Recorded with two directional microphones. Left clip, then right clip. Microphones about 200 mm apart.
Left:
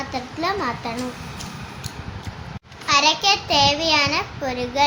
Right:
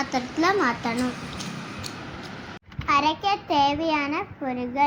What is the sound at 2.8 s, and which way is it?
A child's voice, centre (ahead or behind).